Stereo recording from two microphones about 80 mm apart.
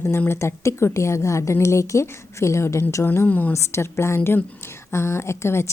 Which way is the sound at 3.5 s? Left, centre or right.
Left.